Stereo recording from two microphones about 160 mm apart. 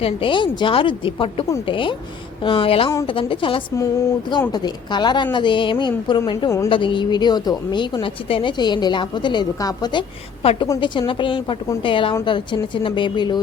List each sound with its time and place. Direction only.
0.0 s a woman's voice: 35° left (ahead or behind)